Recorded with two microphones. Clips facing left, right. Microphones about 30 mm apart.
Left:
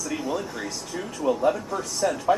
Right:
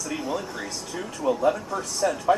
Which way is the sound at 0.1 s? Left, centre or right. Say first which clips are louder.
Even; centre.